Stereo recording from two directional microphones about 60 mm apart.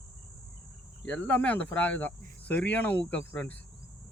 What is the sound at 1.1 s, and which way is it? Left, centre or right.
Speech, left.